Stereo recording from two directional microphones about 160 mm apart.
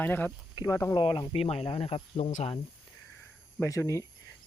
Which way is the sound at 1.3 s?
40° left (ahead or behind).